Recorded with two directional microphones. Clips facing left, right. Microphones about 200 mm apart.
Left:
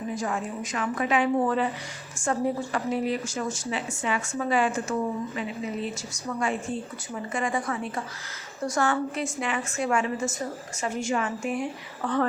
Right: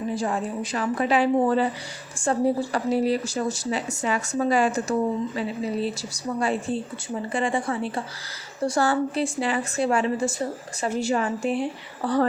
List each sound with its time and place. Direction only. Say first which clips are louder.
0.1 s a woman's voice: right 2 dB; 30° right (ahead or behind)